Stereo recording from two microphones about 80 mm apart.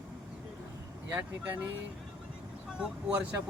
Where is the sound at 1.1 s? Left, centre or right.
Centre.